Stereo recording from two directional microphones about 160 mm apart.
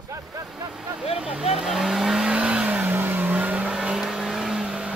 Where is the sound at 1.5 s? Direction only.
Centre (ahead or behind).